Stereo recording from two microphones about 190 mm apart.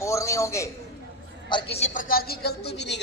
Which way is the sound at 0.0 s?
15° left (ahead or behind).